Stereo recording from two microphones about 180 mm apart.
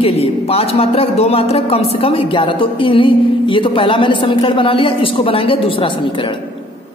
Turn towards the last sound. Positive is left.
turn(degrees=25)  # may be behind; listen again after turning